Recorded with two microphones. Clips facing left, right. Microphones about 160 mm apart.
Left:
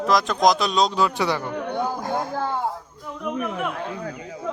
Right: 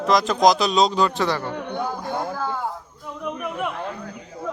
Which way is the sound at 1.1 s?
15° left (ahead or behind).